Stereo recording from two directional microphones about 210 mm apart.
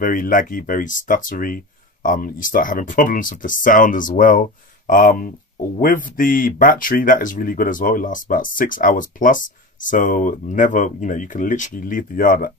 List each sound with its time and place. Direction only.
0.0 s speech: 40° left (ahead or behind)